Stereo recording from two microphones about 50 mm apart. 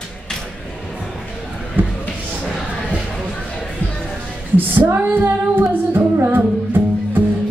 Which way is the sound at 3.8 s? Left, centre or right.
Left.